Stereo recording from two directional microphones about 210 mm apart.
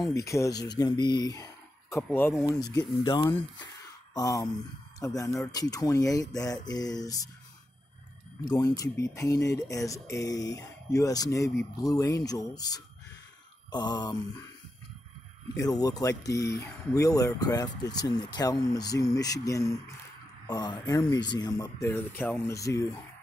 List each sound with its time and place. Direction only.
0.0 s speech: 15° left (ahead or behind)
8.5 s speech: 15° left (ahead or behind)
13.7 s a sound: 20° left (ahead or behind)
15.6 s speech: 20° left (ahead or behind)